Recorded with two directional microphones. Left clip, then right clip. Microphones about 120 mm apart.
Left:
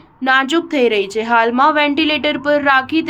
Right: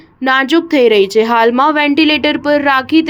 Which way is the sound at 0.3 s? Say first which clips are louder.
Right 3 dB; 45° right (ahead or behind).